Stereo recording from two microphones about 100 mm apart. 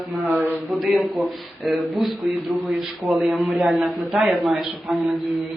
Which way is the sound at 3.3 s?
5° right (ahead or behind).